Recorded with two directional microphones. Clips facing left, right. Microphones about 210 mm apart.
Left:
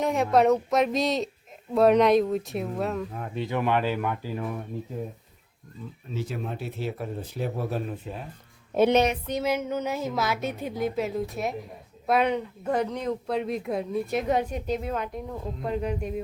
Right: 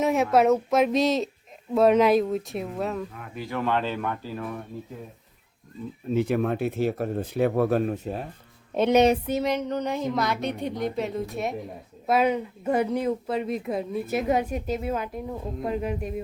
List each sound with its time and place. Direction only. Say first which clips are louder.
0.0 s speech: right 1 dB; centre (ahead or behind)
3.2 s speech: left 2 dB; 25° left (ahead or behind)
6.1 s speech: right 9 dB; 65° right (ahead or behind)
7.9 s speech: right 5 dB; 40° right (ahead or behind)
8.7 s speech: right 2 dB; centre (ahead or behind)